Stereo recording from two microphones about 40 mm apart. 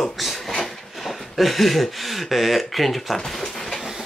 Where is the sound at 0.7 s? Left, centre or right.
Centre.